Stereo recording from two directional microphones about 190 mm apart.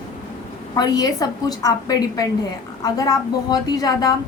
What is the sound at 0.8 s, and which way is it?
A woman's voice, 20° left (ahead or behind).